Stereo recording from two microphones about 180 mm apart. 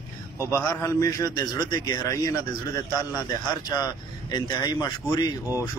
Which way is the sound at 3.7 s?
25° left (ahead or behind).